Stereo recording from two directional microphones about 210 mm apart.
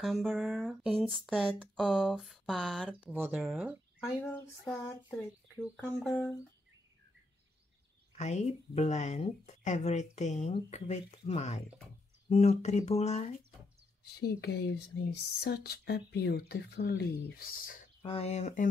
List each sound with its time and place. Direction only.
0.0 s speech: centre (ahead or behind)
8.2 s speech: 35° left (ahead or behind)
14.0 s speech: 50° left (ahead or behind)
18.0 s speech: 30° left (ahead or behind)